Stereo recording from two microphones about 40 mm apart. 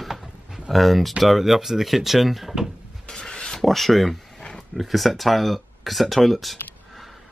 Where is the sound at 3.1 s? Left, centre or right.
Centre.